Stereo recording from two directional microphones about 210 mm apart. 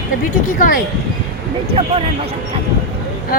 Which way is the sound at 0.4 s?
40° left (ahead or behind).